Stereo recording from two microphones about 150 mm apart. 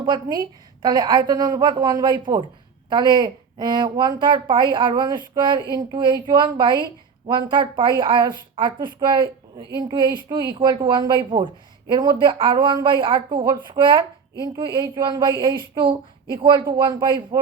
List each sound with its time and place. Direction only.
0.0 s a woman's voice: 30° right (ahead or behind)